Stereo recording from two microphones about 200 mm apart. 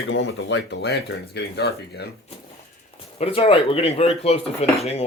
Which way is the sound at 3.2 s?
25° left (ahead or behind).